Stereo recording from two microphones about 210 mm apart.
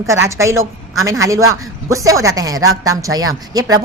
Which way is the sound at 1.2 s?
15° right (ahead or behind).